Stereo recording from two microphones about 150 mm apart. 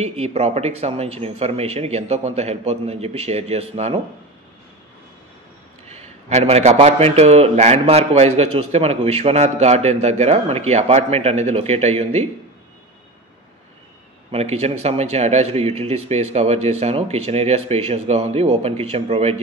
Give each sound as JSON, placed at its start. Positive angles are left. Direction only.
{"t": 0.0, "sound": "a man's voice", "side_deg": -45}
{"t": 5.9, "sound": "a man's voice", "side_deg": -45}
{"t": 14.3, "sound": "a man's voice", "side_deg": -45}